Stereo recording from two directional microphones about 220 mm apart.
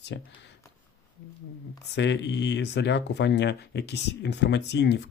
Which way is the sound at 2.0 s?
55° left (ahead or behind).